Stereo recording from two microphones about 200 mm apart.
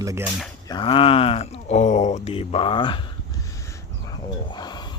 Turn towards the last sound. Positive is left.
turn(degrees=20)  # may be behind; listen again after turning